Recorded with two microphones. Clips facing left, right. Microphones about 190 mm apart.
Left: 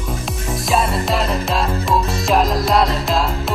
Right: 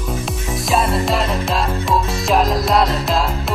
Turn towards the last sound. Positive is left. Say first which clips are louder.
# even
turn(degrees=0)  # may be behind; listen again after turning